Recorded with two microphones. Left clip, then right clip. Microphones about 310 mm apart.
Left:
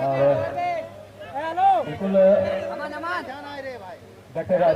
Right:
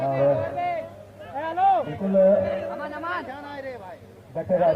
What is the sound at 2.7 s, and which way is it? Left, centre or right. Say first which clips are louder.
Chatter: left 2 dB; centre.